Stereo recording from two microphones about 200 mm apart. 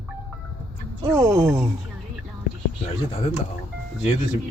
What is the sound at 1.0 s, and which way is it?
Speech, 15° right (ahead or behind).